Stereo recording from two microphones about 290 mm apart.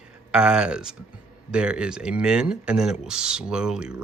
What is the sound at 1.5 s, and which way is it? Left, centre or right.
A man's voice, centre.